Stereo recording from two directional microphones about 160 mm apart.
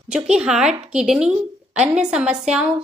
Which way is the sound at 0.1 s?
5° right (ahead or behind).